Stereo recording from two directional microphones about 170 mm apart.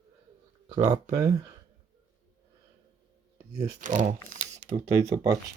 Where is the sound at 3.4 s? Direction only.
20° right (ahead or behind).